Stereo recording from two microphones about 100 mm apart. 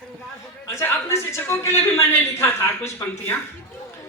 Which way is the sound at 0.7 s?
25° left (ahead or behind).